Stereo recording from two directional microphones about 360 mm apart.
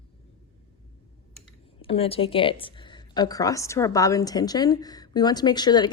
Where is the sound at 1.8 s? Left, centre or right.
Centre.